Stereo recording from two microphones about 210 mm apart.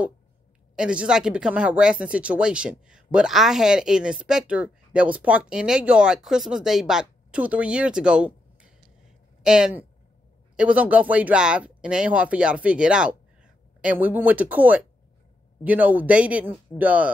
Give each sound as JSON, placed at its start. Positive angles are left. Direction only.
{"t": 0.7, "sound": "a man's voice", "side_deg": -5}